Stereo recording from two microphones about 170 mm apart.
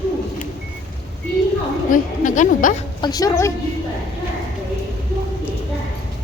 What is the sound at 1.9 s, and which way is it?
Speech, 50° left (ahead or behind).